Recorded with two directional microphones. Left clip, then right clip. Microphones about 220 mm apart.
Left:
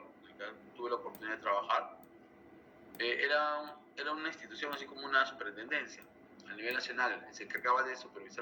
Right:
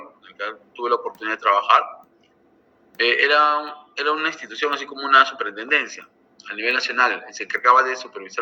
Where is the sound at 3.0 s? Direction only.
40° right (ahead or behind).